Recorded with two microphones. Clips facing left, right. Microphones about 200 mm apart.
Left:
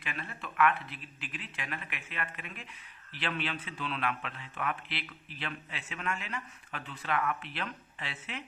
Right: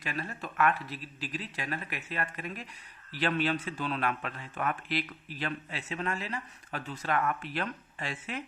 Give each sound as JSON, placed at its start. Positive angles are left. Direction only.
{"t": 0.0, "sound": "a man's voice", "side_deg": -40}